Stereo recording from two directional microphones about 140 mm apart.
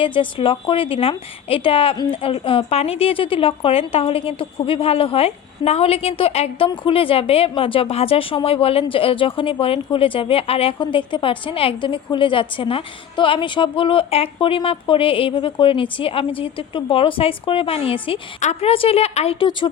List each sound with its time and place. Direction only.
0.0 s speech: 40° left (ahead or behind)
18.3 s a woman's voice: 55° left (ahead or behind)
18.7 s a woman's voice: 45° left (ahead or behind)